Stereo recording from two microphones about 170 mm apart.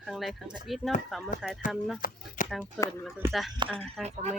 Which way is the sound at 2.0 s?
55° left (ahead or behind).